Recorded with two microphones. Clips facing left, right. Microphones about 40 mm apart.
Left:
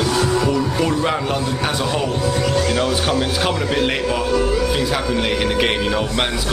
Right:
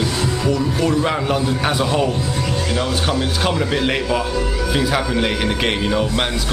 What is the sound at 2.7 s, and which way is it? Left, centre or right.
Speech, centre.